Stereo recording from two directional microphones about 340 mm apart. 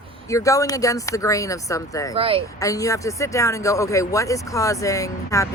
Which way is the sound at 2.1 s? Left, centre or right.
Centre.